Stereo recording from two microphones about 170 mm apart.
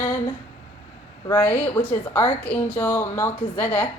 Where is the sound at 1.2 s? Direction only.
15° left (ahead or behind).